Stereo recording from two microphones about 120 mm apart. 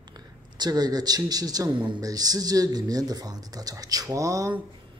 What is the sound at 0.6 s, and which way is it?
Speech, 35° right (ahead or behind).